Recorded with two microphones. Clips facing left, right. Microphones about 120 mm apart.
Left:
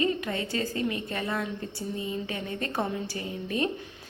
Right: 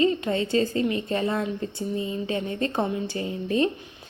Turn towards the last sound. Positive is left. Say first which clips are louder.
# right 6 dB
turn(degrees=-30)  # may be behind; listen again after turning